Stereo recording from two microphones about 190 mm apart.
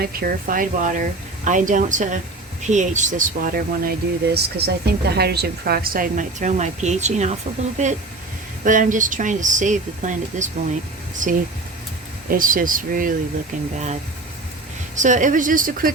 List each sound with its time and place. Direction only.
0.0 s a woman's voice: 50° right (ahead or behind)
4.4 s a woman's voice: 60° right (ahead or behind)
14.9 s a woman's voice: 40° right (ahead or behind)